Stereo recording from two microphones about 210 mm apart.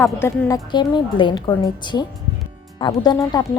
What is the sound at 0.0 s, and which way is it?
Speech, 10° left (ahead or behind).